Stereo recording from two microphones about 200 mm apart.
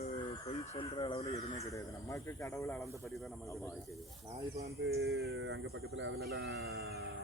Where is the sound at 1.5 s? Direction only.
15° left (ahead or behind).